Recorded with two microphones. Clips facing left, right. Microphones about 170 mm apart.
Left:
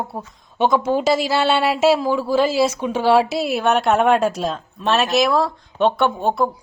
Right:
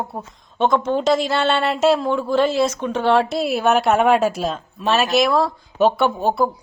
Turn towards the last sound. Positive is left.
turn(degrees=0)  # may be behind; listen again after turning